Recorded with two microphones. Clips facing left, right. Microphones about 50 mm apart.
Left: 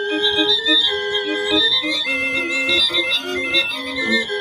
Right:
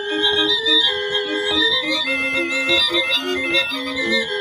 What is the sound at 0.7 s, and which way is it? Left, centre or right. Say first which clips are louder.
Music: even; centre.